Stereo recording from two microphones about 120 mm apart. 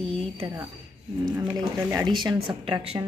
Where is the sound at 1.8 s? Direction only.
15° right (ahead or behind).